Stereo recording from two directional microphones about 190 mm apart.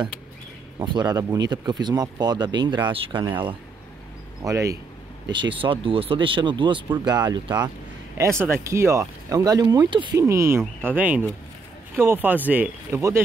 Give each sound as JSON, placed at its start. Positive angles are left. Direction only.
{"t": 0.8, "sound": "speech", "side_deg": -20}
{"t": 4.4, "sound": "speech", "side_deg": -15}